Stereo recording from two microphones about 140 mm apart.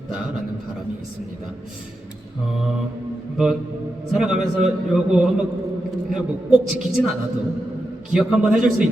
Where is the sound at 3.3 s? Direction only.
5° right (ahead or behind).